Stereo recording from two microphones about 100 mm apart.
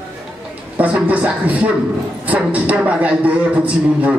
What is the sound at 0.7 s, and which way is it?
Speech, 15° right (ahead or behind).